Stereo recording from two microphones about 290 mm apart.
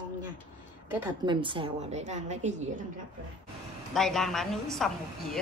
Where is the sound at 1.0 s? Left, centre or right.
Centre.